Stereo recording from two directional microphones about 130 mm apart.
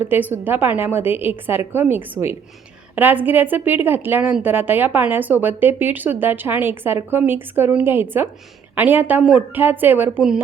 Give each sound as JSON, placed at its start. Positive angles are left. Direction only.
{"t": 0.0, "sound": "a woman's voice", "side_deg": -15}